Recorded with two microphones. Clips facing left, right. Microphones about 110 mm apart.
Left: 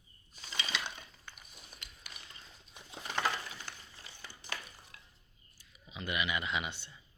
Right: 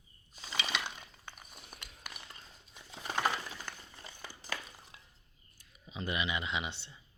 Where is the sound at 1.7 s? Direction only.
55° right (ahead or behind).